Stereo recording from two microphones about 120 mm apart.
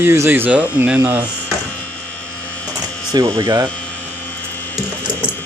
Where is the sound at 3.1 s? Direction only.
35° right (ahead or behind).